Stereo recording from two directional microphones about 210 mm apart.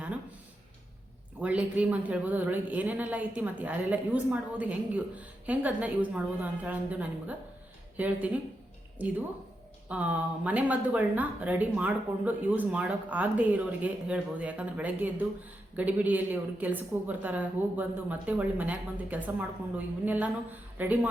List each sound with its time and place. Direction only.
1.4 s speech: 5° right (ahead or behind)